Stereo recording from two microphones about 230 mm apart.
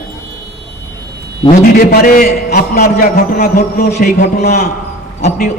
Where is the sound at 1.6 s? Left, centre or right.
Left.